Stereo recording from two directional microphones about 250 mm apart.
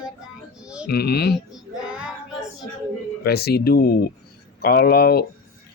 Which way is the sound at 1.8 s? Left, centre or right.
Centre.